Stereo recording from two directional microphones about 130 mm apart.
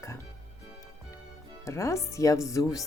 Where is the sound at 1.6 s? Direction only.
20° left (ahead or behind).